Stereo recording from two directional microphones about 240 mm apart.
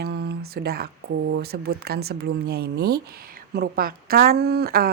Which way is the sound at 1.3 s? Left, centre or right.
Right.